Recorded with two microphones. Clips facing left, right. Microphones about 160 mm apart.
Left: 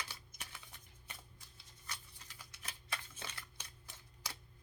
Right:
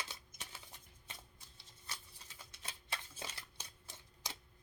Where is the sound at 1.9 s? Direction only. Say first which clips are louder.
Even; 25° right (ahead or behind).